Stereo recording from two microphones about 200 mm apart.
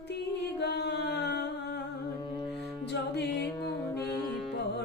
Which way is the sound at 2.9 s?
55° left (ahead or behind).